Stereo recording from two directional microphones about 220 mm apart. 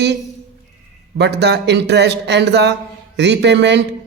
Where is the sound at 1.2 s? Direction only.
50° right (ahead or behind).